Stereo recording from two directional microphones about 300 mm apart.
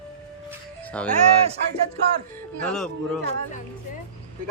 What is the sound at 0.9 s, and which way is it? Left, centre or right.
Speech, centre.